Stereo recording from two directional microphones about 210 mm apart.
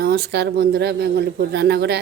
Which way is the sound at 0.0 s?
50° right (ahead or behind).